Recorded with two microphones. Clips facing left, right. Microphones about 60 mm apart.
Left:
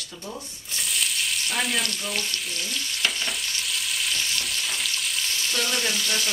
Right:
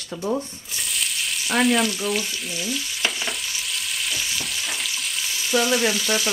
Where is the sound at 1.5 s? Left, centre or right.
Right.